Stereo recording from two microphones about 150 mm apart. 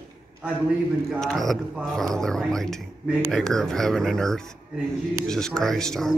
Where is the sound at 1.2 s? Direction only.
5° left (ahead or behind).